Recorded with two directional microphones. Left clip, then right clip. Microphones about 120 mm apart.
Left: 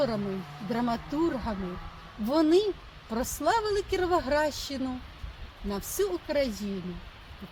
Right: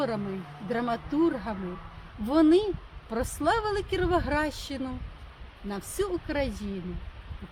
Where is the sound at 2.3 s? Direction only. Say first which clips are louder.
Right 2 dB; 25° right (ahead or behind).